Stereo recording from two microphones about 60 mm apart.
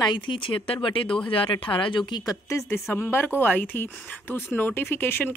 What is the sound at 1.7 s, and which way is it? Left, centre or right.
Speech, left.